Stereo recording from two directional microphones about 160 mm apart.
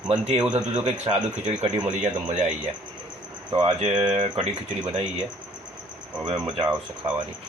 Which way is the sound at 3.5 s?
40° right (ahead or behind).